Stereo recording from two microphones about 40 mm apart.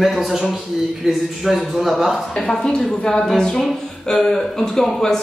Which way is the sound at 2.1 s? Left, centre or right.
Centre.